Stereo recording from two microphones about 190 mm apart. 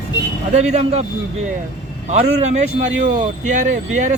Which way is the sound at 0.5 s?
35° right (ahead or behind).